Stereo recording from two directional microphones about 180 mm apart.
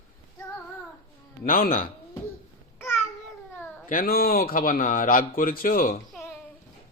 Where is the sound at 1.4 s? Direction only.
50° left (ahead or behind).